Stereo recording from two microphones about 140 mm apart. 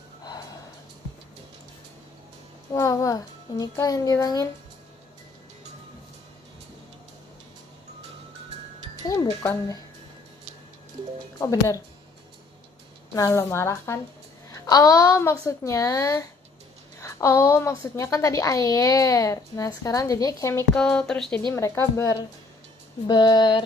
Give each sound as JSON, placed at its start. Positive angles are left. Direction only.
{"t": 2.7, "sound": "a woman's voice", "side_deg": 25}
{"t": 9.0, "sound": "speech", "side_deg": 25}
{"t": 11.3, "sound": "a woman's voice", "side_deg": 25}
{"t": 13.1, "sound": "a woman's voice", "side_deg": 20}
{"t": 20.7, "sound": "speech", "side_deg": 5}
{"t": 21.5, "sound": "a woman's voice", "side_deg": 20}
{"t": 23.0, "sound": "a sound", "side_deg": 30}